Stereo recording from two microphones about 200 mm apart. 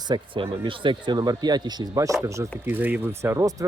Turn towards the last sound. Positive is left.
turn(degrees=-15)  # may be behind; listen again after turning